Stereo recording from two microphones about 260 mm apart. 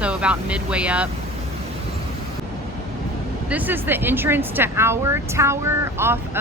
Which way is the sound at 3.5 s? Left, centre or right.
Centre.